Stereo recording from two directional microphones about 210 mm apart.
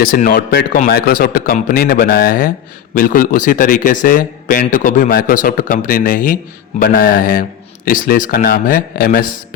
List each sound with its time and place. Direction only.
0.0 s a man's voice: 40° left (ahead or behind)